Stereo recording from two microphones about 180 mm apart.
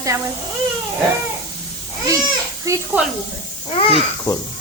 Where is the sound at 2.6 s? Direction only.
15° right (ahead or behind).